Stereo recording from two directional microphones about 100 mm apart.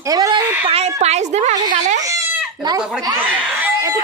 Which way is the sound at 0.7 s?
90° right.